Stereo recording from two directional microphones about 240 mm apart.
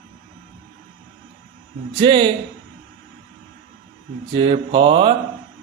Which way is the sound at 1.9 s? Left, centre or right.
Centre.